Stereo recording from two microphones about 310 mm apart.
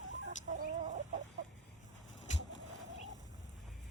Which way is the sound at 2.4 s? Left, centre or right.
Left.